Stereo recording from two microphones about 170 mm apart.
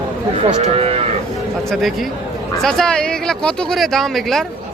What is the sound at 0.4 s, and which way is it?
Cattle, 35° right (ahead or behind).